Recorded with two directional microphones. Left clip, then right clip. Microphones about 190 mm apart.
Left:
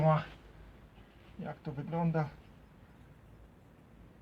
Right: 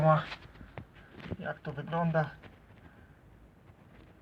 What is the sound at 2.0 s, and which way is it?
Speech, 40° right (ahead or behind).